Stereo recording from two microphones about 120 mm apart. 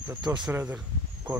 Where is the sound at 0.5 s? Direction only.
10° right (ahead or behind).